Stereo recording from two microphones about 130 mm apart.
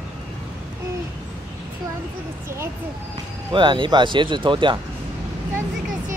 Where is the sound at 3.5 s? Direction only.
40° right (ahead or behind).